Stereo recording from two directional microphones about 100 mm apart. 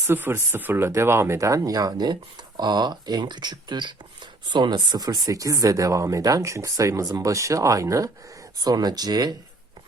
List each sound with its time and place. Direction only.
0.1 s speech: 25° right (ahead or behind); by 9.3 s 40° right (ahead or behind)